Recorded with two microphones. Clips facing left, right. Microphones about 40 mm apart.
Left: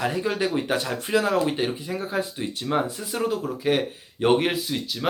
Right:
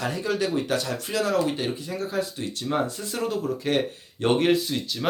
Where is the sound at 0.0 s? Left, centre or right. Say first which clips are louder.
Left 2 dB; left.